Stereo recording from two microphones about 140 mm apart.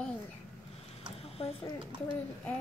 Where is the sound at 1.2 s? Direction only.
45° left (ahead or behind).